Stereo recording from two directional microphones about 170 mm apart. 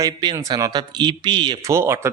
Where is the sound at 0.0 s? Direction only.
25° right (ahead or behind).